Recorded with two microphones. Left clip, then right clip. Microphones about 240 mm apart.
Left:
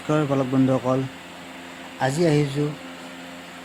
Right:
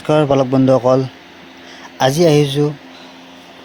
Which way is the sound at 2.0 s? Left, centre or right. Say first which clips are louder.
Right 9 dB; right.